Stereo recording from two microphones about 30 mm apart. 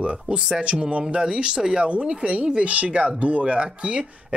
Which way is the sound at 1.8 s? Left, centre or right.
Right.